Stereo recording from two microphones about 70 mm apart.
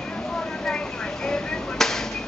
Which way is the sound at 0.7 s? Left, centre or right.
Centre.